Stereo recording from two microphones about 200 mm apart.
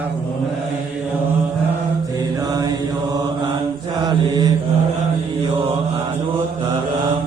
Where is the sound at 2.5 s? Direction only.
20° right (ahead or behind).